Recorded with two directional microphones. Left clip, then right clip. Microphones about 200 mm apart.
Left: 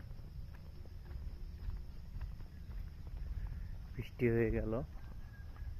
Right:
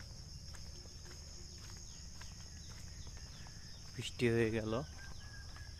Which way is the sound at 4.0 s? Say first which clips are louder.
Even; 15° right (ahead or behind).